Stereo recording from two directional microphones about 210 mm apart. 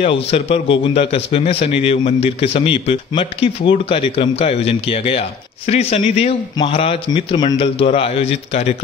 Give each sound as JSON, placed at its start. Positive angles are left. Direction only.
{"t": 0.0, "sound": "a man's voice", "side_deg": 30}